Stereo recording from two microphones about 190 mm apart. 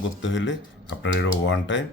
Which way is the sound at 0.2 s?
75° left (ahead or behind).